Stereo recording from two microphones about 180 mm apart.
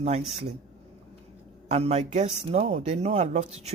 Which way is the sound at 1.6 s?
35° right (ahead or behind).